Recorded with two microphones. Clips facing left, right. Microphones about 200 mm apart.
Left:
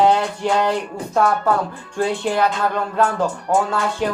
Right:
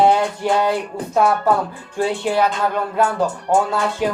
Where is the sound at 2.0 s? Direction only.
10° right (ahead or behind).